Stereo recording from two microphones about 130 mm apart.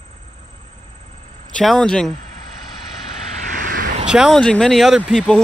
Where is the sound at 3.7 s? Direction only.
90° right.